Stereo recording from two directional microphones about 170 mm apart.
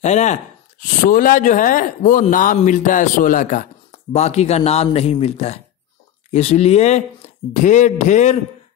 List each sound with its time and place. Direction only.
0.0 s speech: 45° left (ahead or behind)
4.1 s speech: 40° left (ahead or behind)